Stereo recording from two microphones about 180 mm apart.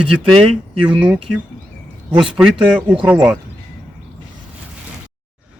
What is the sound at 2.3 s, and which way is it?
Speech, 5° right (ahead or behind).